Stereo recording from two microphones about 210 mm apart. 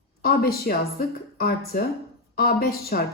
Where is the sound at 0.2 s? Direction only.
45° left (ahead or behind).